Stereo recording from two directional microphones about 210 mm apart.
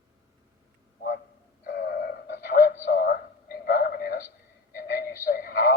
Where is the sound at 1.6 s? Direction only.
50° left (ahead or behind).